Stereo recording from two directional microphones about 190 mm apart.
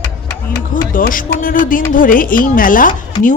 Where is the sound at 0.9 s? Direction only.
45° left (ahead or behind).